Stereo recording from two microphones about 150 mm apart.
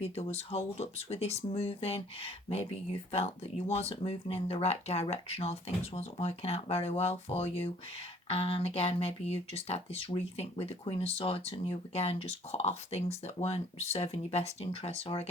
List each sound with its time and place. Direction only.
0.0 s speech: 40° left (ahead or behind)